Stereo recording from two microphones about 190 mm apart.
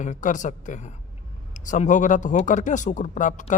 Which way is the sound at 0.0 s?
40° left (ahead or behind).